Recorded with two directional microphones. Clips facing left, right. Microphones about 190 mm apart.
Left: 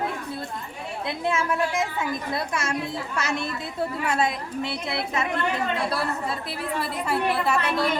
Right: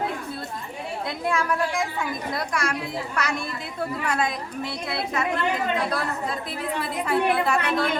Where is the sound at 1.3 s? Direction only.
20° left (ahead or behind).